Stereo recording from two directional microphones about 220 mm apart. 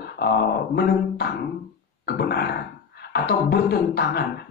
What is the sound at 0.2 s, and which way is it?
Speech, 45° left (ahead or behind).